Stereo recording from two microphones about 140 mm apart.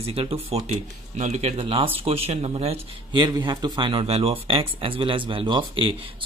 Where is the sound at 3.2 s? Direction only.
30° right (ahead or behind).